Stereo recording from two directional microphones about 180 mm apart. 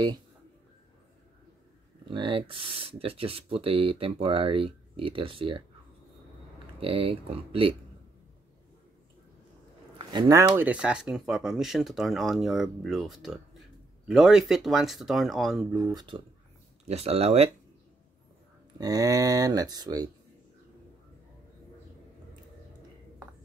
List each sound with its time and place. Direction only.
2.0 s speech: 25° right (ahead or behind)
6.8 s speech: 30° right (ahead or behind)
9.9 s speech: 25° right (ahead or behind); by 15.8 s 5° right (ahead or behind)
15.8 s speech: 20° right (ahead or behind)
16.8 s speech: 35° right (ahead or behind)
18.8 s speech: 20° right (ahead or behind)